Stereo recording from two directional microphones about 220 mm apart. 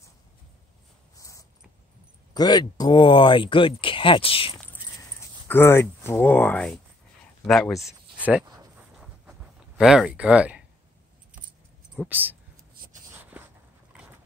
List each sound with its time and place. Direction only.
1.1 s a sound: 15° left (ahead or behind)
2.3 s speech: 20° left (ahead or behind)
5.5 s speech: 10° left (ahead or behind)
7.8 s a sound: 5° right (ahead or behind)
9.8 s speech: 5° right (ahead or behind)
12.1 s speech: 10° right (ahead or behind)